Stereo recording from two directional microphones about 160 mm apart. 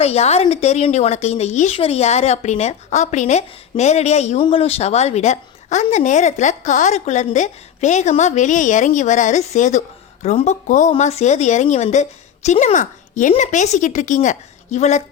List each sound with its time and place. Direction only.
0.0 s speech: 40° left (ahead or behind)